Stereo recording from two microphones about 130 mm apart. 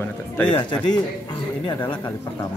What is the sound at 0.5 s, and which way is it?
Speech, 35° left (ahead or behind).